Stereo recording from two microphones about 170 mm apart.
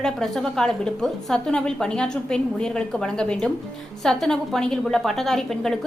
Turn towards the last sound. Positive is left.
turn(degrees=5)  # may be behind; listen again after turning